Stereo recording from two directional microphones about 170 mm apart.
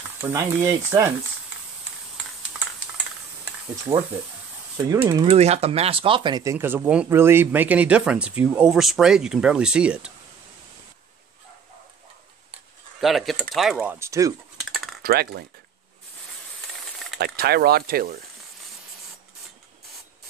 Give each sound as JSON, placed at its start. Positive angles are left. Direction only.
{"t": 0.2, "sound": "speech", "side_deg": -15}
{"t": 3.9, "sound": "speech", "side_deg": -25}
{"t": 5.2, "sound": "speech", "side_deg": -35}
{"t": 13.0, "sound": "speech", "side_deg": 0}
{"t": 13.7, "sound": "speech", "side_deg": -15}
{"t": 14.6, "sound": "typing", "side_deg": 0}
{"t": 15.0, "sound": "speech", "side_deg": -65}
{"t": 17.2, "sound": "speech", "side_deg": -65}